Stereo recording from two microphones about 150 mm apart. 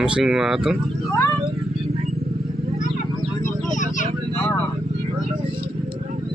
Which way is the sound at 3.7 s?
55° left (ahead or behind).